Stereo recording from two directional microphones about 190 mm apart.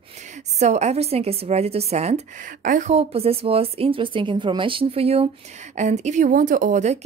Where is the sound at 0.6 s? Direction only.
35° right (ahead or behind).